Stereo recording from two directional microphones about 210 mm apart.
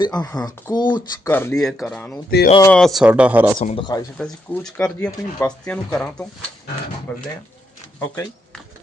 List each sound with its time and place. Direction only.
0.0 s speech: 20° left (ahead or behind)
1.3 s speech: 10° left (ahead or behind); by 3.5 s 5° right (ahead or behind)
3.6 s speech: 25° left (ahead or behind)
4.2 s speech: 5° left (ahead or behind)
7.9 s speech: 10° left (ahead or behind)